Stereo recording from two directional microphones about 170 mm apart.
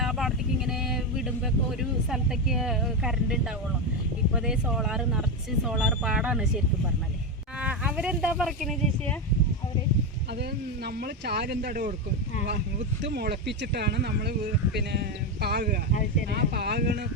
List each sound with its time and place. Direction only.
0.0 s vehicle: centre (ahead or behind)
1.8 s speech: centre (ahead or behind)
4.4 s speech: 5° right (ahead or behind)
7.6 s speech: 5° right (ahead or behind)
10.8 s speech: 70° right (ahead or behind)
13.0 s speech: 80° right
15.9 s speech: 50° left (ahead or behind)
16.3 s speech: 70° right (ahead or behind)